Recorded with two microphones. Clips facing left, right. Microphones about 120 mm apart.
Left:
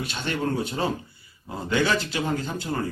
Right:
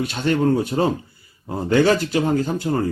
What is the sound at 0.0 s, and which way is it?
Speech, 45° right (ahead or behind).